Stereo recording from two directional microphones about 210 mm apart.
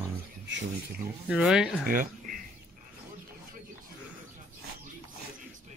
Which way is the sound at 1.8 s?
40° right (ahead or behind).